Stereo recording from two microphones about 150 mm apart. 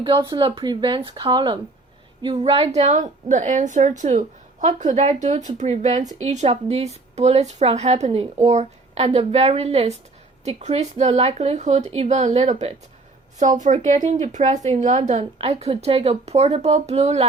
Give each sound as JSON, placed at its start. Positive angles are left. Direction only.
{"t": 0.0, "sound": "speech", "side_deg": -30}